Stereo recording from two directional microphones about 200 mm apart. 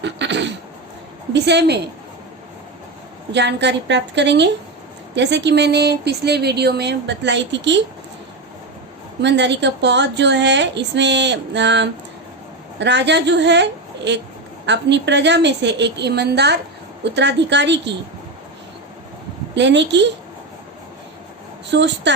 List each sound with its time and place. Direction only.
0.0 s speech: 60° right (ahead or behind)
3.3 s speech: 60° right (ahead or behind)
9.2 s speech: 60° right (ahead or behind)
19.5 s speech: 60° right (ahead or behind)
21.7 s speech: 60° right (ahead or behind)